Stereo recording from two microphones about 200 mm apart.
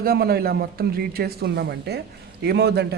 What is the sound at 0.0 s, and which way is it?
A man's voice, 50° right (ahead or behind).